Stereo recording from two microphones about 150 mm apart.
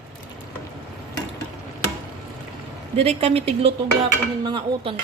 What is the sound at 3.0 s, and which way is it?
Speech, 40° right (ahead or behind).